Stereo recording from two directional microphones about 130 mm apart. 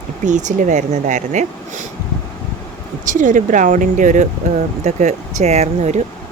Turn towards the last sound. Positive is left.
turn(degrees=-60)  # may be behind; listen again after turning